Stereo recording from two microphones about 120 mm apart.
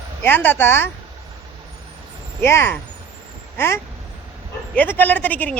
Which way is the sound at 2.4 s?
20° left (ahead or behind).